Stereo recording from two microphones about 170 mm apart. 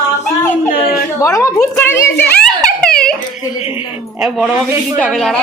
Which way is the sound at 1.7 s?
15° left (ahead or behind).